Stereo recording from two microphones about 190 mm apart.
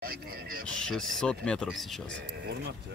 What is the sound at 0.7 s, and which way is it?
Speech, 5° left (ahead or behind).